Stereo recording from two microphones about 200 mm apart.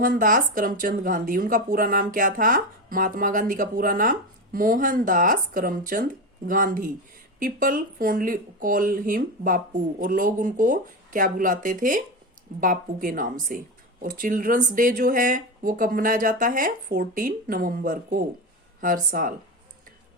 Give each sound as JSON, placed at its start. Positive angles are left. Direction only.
{"t": 0.0, "sound": "speech", "side_deg": -45}